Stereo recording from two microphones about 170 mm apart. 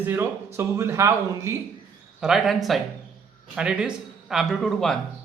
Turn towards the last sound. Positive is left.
turn(degrees=0)  # may be behind; listen again after turning